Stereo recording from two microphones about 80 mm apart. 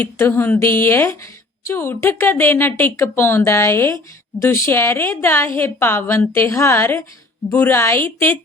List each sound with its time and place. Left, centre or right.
0.0 s a woman's voice: left